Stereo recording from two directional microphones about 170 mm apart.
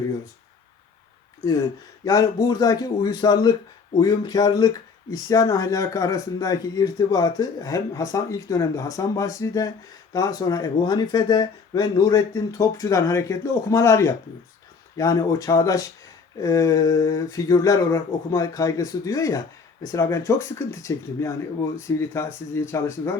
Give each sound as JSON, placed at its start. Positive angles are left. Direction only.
{"t": 2.0, "sound": "speech", "side_deg": 20}